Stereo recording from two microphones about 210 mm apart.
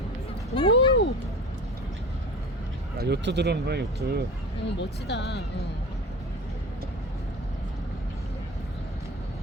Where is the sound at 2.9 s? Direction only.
50° right (ahead or behind).